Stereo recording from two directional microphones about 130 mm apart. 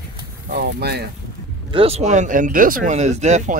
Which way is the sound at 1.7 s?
50° right (ahead or behind).